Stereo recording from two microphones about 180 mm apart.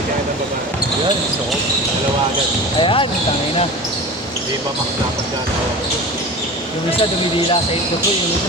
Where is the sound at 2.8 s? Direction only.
30° left (ahead or behind).